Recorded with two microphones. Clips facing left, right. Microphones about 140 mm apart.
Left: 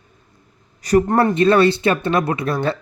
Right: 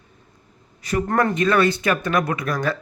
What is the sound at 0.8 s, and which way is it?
Speech, 40° left (ahead or behind).